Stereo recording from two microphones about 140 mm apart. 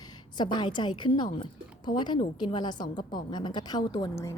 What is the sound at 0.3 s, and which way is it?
A woman's voice, 30° left (ahead or behind).